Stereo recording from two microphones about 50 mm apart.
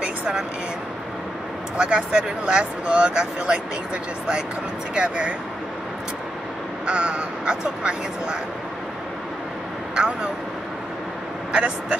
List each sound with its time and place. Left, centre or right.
0.0 s a sound: centre
1.8 s speech: right
4.9 s speech: right
6.9 s speech: right
9.9 s speech: right
11.5 s speech: right